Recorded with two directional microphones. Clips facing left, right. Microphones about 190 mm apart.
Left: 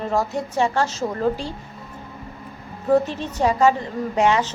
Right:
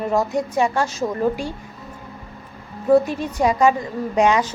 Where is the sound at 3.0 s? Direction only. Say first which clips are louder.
Right 2 dB; 10° right (ahead or behind).